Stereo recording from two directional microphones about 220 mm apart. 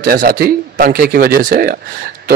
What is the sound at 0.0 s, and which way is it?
A man's voice, 40° right (ahead or behind).